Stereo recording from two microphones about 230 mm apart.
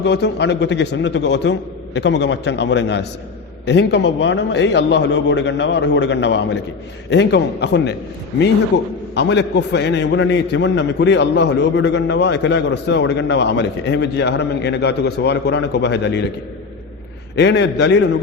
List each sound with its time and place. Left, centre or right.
0.0 s a man's voice: left
17.3 s a man's voice: left